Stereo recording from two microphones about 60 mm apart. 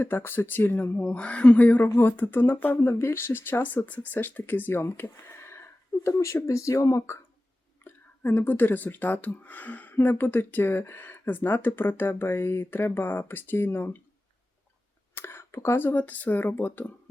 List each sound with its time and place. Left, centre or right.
0.0 s speech: left
1.1 s speech: centre
2.0 s speech: left
7.9 s speech: left
15.1 s speech: left